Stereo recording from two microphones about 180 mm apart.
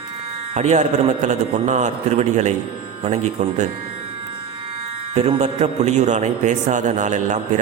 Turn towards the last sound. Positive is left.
turn(degrees=-40)  # may be behind; listen again after turning